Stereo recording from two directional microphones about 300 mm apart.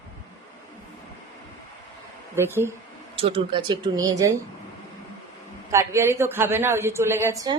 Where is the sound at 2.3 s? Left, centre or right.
Centre.